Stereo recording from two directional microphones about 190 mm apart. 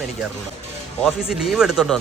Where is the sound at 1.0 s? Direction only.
Centre (ahead or behind).